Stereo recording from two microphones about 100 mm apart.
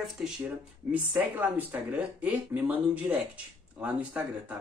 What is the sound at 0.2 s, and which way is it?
Speech, 5° right (ahead or behind).